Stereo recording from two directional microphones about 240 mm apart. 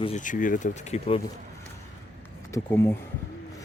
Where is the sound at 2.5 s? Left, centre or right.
Centre.